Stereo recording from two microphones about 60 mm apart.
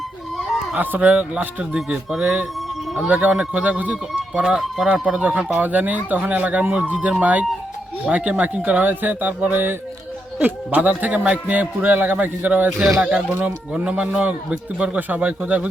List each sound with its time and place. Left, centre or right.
0.8 s a man's voice: right
4.5 s speech: centre
5.2 s a man's voice: right
13.0 s a man's voice: centre